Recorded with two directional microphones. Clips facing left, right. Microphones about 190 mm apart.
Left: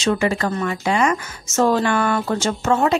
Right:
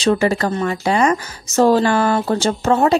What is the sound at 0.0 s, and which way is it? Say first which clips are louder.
Speech: right 3 dB; 35° right (ahead or behind).